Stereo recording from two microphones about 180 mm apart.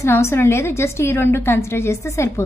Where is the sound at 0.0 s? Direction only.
15° left (ahead or behind).